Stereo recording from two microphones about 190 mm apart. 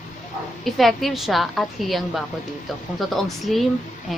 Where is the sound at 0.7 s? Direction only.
Centre (ahead or behind).